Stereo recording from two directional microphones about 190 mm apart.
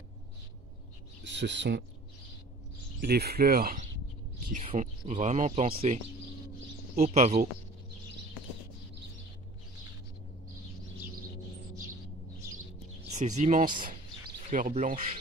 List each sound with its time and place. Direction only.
1.2 s speech: 70° right (ahead or behind)
3.0 s speech: 55° right (ahead or behind); by 5.9 s 35° right (ahead or behind)
7.0 s speech: 35° right (ahead or behind)
13.1 s speech: 40° right (ahead or behind)